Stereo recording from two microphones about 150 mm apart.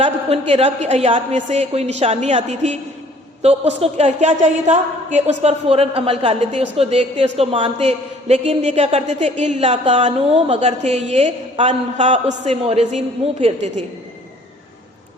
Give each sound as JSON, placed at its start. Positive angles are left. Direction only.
{"t": 0.0, "sound": "a woman's voice", "side_deg": -40}